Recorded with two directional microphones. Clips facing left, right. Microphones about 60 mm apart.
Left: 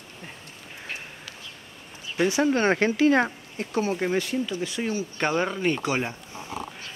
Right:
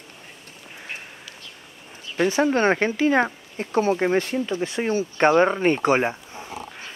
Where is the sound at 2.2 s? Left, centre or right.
Right.